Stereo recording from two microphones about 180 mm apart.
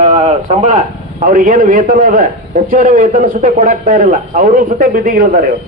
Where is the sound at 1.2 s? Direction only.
50° right (ahead or behind).